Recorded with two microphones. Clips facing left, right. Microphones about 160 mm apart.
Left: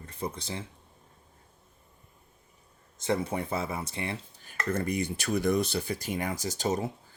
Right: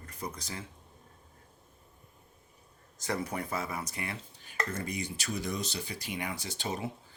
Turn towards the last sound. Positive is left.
turn(degrees=40)  # may be behind; listen again after turning